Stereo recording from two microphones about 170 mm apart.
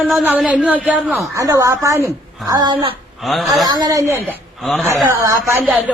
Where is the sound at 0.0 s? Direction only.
10° right (ahead or behind).